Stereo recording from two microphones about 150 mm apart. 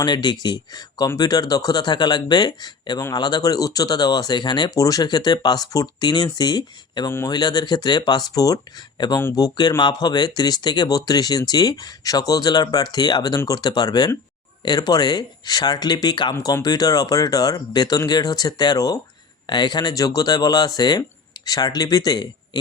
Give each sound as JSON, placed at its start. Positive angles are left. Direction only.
{"t": 0.0, "sound": "speech", "side_deg": 30}